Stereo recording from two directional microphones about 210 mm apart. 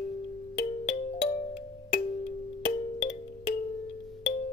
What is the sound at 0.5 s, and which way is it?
Music, 30° left (ahead or behind).